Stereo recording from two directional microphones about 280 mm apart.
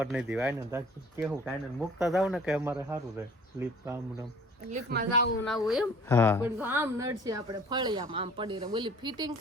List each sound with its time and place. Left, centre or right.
0.0 s speech: centre
4.7 s a woman's voice: right
5.4 s speech: centre
6.4 s speech: centre